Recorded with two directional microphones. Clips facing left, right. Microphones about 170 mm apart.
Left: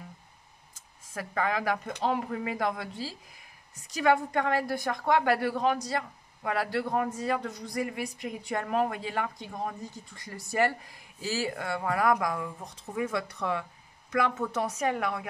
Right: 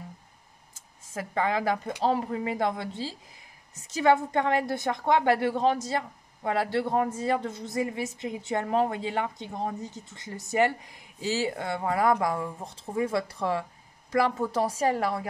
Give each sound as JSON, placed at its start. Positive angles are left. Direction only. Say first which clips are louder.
{"t": 1.1, "sound": "a woman's voice", "louder": "right 2 dB", "side_deg": -25}